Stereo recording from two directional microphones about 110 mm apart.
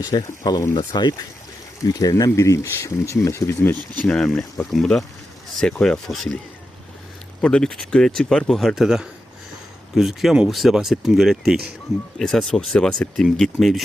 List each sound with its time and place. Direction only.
0.0 s speech: 35° left (ahead or behind)
4.0 s speech: 5° left (ahead or behind)
7.4 s speech: 5° left (ahead or behind)